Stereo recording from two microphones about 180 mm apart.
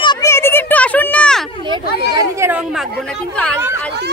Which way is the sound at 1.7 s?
20° right (ahead or behind).